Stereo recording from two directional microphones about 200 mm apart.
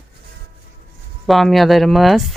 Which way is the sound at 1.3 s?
Centre (ahead or behind).